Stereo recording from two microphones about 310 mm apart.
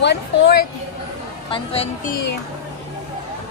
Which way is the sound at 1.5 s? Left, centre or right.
Centre.